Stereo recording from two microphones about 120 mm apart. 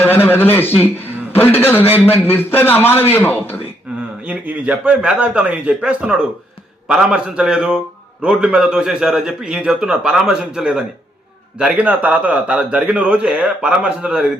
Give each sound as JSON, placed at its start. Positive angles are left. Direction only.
{"t": 0.0, "sound": "a man's voice", "side_deg": 15}
{"t": 4.3, "sound": "a man's voice", "side_deg": -10}